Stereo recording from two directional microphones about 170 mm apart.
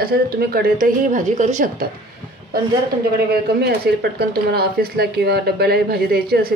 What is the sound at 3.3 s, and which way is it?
Speech, 70° right (ahead or behind).